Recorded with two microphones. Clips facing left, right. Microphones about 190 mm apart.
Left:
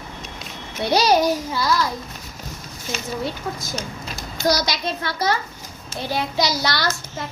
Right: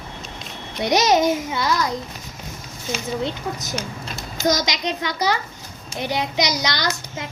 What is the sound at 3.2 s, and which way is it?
A child's voice, 20° right (ahead or behind).